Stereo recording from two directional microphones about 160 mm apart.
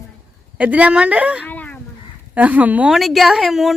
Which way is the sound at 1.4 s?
10° left (ahead or behind).